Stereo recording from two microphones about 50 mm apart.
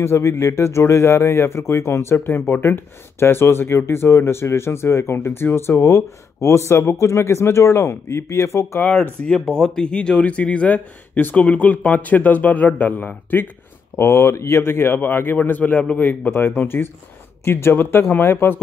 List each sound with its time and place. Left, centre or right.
0.0 s speech: left
9.5 s speech: centre; by 12.9 s left
13.9 s speech: left
18.2 s speech: left